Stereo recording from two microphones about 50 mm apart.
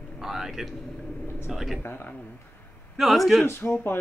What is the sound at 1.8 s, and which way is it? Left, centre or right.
Speech, left.